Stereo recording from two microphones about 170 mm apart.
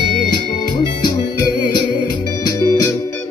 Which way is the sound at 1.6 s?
25° left (ahead or behind).